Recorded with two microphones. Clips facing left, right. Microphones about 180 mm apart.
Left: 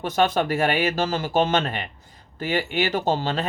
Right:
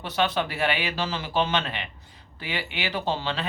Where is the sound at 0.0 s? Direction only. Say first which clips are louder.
Left 5 dB; 45° left (ahead or behind).